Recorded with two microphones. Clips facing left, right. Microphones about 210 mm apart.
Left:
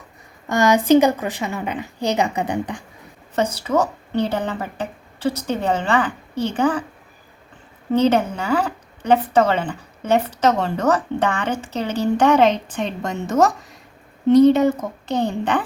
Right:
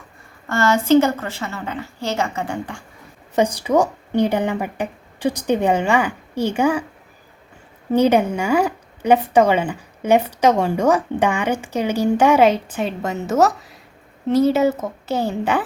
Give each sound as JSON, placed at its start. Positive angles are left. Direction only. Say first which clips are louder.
{"t": 0.4, "sound": "a woman's voice", "louder": "left 2 dB", "side_deg": 15}
{"t": 3.3, "sound": "speech", "louder": "right 3 dB", "side_deg": -15}
{"t": 7.9, "sound": "a woman's voice", "louder": "right 2 dB", "side_deg": -10}